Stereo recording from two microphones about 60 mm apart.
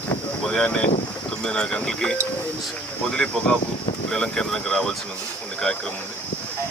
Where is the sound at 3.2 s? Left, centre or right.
Centre.